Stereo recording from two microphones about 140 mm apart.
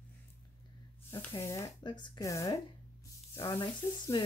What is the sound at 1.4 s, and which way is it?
Speech, 20° left (ahead or behind).